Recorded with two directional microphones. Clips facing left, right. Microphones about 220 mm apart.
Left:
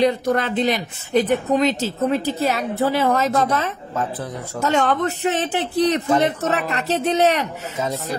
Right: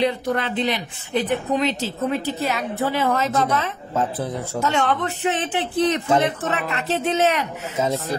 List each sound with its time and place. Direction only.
0.0 s a woman's voice: 45° left (ahead or behind)